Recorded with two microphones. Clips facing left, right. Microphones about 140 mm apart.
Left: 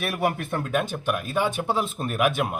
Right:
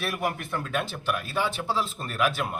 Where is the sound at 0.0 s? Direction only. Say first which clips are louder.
Left 4 dB; 60° left (ahead or behind).